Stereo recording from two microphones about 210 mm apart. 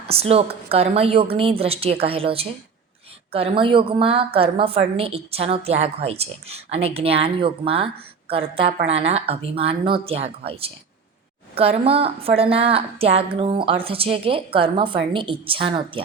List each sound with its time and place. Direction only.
0.1 s a woman's voice: 30° right (ahead or behind)